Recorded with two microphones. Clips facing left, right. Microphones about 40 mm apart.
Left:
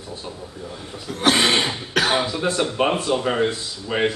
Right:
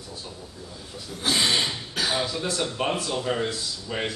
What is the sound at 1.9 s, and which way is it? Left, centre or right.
Speech, left.